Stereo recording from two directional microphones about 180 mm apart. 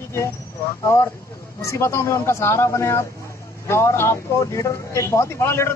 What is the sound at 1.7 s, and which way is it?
A man's voice, 15° left (ahead or behind).